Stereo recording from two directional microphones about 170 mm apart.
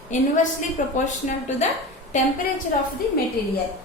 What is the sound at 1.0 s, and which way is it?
Speech, 45° left (ahead or behind).